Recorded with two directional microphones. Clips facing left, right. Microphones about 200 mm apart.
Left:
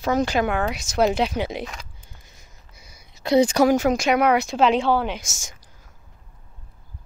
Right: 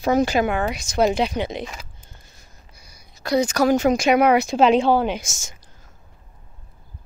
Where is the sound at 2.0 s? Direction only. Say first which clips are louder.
Right 1 dB; 15° left (ahead or behind).